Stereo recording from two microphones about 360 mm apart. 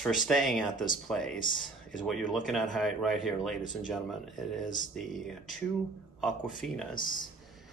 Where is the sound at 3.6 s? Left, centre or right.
Left.